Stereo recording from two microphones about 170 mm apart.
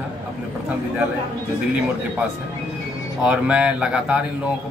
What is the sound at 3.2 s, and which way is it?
Speech, 5° right (ahead or behind).